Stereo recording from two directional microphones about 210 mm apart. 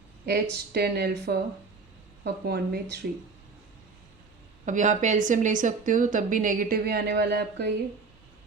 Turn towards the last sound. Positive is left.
turn(degrees=-55)  # may be behind; listen again after turning